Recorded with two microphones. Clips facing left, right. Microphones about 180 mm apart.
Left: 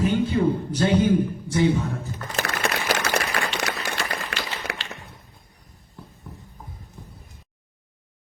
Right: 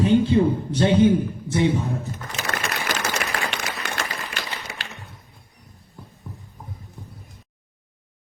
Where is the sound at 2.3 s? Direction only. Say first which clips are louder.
Left 3 dB; 60° left (ahead or behind).